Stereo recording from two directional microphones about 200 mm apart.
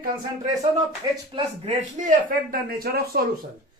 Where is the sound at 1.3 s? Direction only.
35° right (ahead or behind).